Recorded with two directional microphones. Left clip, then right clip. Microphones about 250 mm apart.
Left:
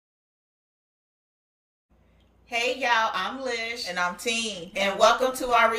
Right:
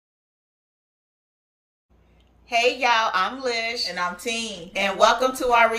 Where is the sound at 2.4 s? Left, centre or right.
Centre.